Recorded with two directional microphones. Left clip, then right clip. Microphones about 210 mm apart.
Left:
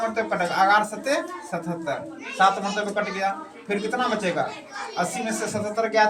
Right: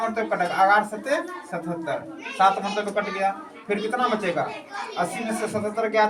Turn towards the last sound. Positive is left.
turn(degrees=-10)  # may be behind; listen again after turning